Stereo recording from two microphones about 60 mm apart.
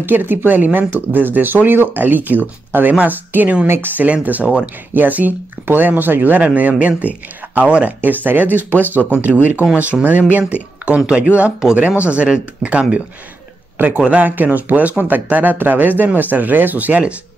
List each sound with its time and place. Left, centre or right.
0.0 s speech: right
3.6 s speech: right
13.7 s a man's voice: right